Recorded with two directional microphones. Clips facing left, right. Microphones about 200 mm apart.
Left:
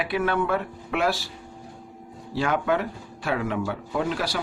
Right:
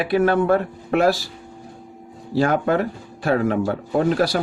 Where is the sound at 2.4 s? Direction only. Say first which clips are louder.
Right 5 dB; 40° right (ahead or behind).